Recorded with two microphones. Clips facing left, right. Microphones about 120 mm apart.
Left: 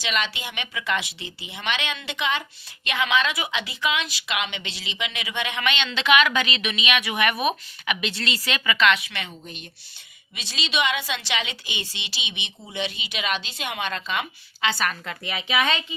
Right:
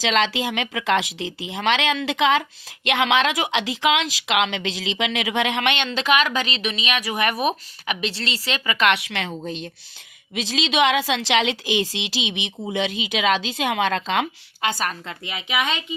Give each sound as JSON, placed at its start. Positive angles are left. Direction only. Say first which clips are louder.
{"t": 0.0, "sound": "speech", "louder": "right 7 dB", "side_deg": -90}
{"t": 5.7, "sound": "a woman's voice", "louder": "even", "side_deg": -45}
{"t": 8.8, "sound": "a woman's voice", "louder": "right 2 dB", "side_deg": -70}
{"t": 14.6, "sound": "a woman's voice", "louder": "right 1 dB", "side_deg": -40}
{"t": 15.0, "sound": "a woman's voice", "louder": "left 1 dB", "side_deg": -20}